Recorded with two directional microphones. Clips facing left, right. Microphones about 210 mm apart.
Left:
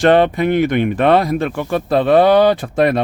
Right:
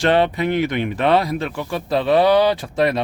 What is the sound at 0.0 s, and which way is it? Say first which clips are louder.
Speech: left 5 dB; 50° left (ahead or behind).